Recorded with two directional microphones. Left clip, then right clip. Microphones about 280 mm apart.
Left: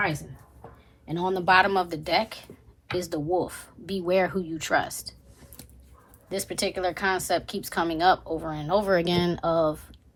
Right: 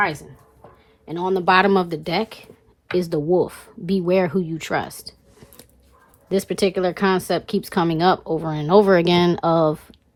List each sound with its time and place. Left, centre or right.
1.0 s speech: right
6.2 s speech: right